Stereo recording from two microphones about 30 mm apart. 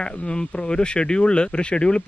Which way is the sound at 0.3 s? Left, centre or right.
Left.